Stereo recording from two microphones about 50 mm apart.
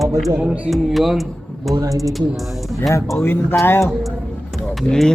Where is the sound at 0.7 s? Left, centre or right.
Centre.